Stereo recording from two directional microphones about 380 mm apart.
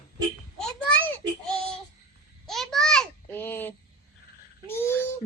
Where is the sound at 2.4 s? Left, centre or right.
Centre.